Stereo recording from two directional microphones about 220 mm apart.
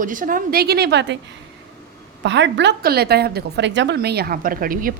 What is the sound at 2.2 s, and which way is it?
A woman's voice, 50° right (ahead or behind).